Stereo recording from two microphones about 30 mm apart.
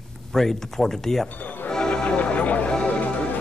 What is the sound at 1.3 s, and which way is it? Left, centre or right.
Music, left.